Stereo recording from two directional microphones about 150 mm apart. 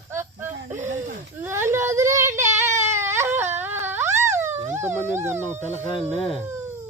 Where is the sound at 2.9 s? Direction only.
15° right (ahead or behind).